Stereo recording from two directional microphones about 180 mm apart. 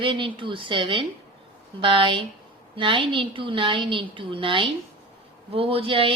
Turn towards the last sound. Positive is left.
turn(degrees=-30)  # may be behind; listen again after turning